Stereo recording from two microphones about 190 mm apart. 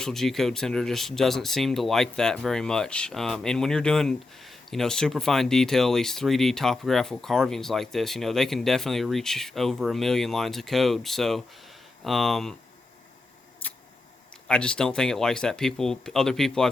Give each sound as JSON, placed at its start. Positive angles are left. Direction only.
{"t": 0.0, "sound": "speech", "side_deg": 0}
{"t": 13.6, "sound": "a sound", "side_deg": 10}
{"t": 14.4, "sound": "speech", "side_deg": 5}